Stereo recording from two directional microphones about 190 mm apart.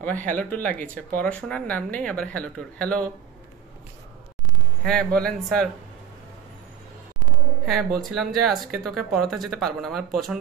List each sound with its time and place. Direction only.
0.0 s speech: 10° left (ahead or behind)
4.8 s speech: 5° left (ahead or behind)
7.6 s speech: centre (ahead or behind)